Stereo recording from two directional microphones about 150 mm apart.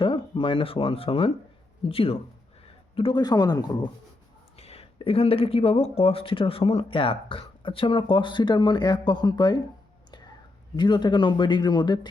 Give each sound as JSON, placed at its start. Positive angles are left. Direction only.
{"t": 0.0, "sound": "speech", "side_deg": 35}
{"t": 4.5, "sound": "speech", "side_deg": 40}
{"t": 10.8, "sound": "speech", "side_deg": 30}